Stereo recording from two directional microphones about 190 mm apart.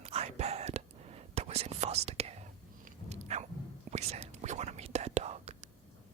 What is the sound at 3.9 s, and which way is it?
Whispering, 35° right (ahead or behind).